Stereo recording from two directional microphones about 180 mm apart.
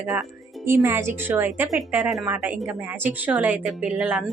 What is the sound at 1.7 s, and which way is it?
A woman's voice, centre (ahead or behind).